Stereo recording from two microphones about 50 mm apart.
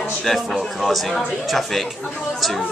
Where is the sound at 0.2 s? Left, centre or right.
Centre.